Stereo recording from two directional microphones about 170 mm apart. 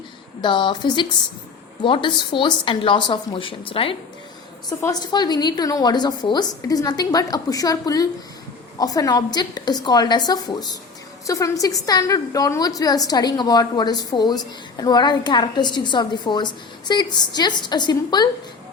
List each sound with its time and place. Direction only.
0.4 s a woman's voice: 30° left (ahead or behind)